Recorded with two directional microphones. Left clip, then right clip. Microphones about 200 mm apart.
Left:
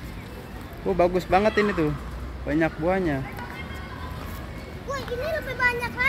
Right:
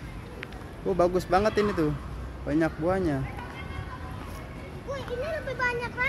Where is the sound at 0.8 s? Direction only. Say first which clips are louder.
Left 3 dB; 10° right (ahead or behind).